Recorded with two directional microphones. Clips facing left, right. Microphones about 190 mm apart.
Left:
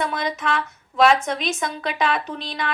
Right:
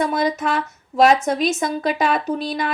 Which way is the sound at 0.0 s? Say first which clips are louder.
Right 5 dB; 45° right (ahead or behind).